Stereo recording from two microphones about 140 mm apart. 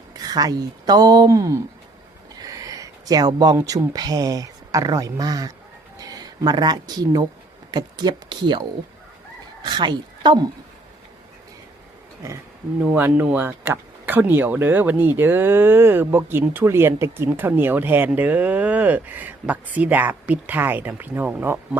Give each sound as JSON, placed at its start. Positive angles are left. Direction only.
{"t": 0.1, "sound": "speech", "side_deg": -30}
{"t": 9.6, "sound": "a woman's voice", "side_deg": -35}
{"t": 12.8, "sound": "speech", "side_deg": -15}